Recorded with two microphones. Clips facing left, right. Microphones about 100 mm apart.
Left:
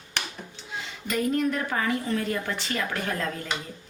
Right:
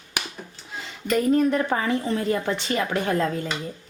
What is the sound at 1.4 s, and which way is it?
A woman's voice, 30° right (ahead or behind).